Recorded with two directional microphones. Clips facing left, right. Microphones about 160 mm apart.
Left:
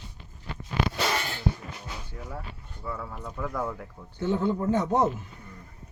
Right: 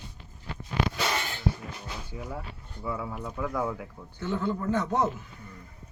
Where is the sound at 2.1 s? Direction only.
5° right (ahead or behind).